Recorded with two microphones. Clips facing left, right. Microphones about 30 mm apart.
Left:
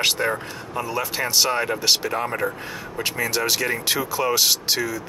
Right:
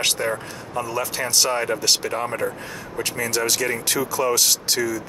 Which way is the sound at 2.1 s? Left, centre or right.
Centre.